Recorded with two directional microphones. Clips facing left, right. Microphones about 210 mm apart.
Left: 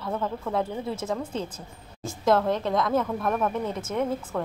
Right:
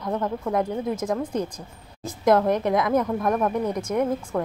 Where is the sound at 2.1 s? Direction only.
20° right (ahead or behind).